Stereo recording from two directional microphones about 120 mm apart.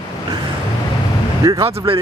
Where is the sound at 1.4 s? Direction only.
30° right (ahead or behind).